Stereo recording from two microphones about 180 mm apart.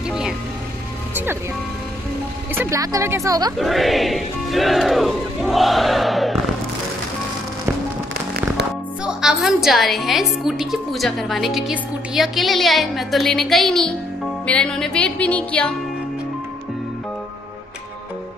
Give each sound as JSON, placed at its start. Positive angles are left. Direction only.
{"t": 1.1, "sound": "speech", "side_deg": -10}
{"t": 2.5, "sound": "speech", "side_deg": -15}
{"t": 3.5, "sound": "a woman's voice", "side_deg": 0}
{"t": 9.0, "sound": "a woman's voice", "side_deg": 0}
{"t": 14.4, "sound": "music", "side_deg": 5}